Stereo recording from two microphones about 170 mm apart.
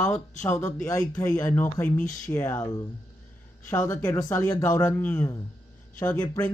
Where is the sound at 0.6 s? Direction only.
15° left (ahead or behind).